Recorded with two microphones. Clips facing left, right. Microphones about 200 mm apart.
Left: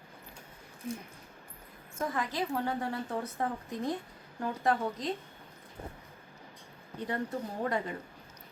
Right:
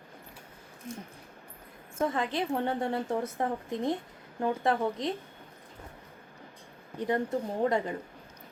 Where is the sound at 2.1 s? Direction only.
25° right (ahead or behind).